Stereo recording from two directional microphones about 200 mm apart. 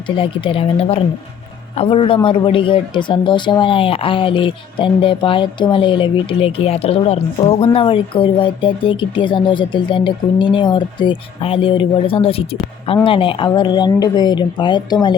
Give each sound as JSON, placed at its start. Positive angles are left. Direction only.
{"t": 0.2, "sound": "speech", "side_deg": 25}